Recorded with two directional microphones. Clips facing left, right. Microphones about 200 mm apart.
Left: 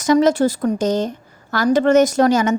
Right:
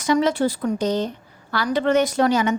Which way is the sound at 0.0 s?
45° left (ahead or behind).